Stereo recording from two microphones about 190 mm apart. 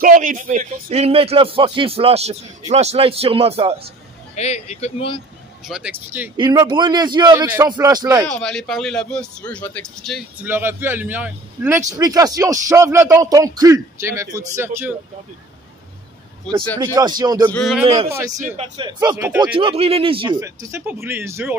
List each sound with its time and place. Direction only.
0.0 s a man's voice: 45° right (ahead or behind)
0.8 s speech: 30° right (ahead or behind)
4.4 s speech: 35° left (ahead or behind)
5.7 s speech: 5° right (ahead or behind)
6.3 s a man's voice: 25° right (ahead or behind)
8.3 s speech: 5° left (ahead or behind)
10.4 s speech: 10° right (ahead or behind)
16.7 s a man's voice: 15° right (ahead or behind)
17.5 s speech: 5° left (ahead or behind)
18.8 s a man's voice: 20° right (ahead or behind)
19.5 s a man's voice: 30° right (ahead or behind)
20.3 s speech: 15° right (ahead or behind)